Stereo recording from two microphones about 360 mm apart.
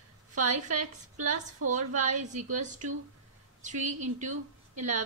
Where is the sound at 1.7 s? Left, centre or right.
Centre.